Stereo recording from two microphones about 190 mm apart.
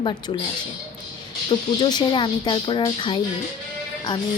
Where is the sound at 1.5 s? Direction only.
25° left (ahead or behind).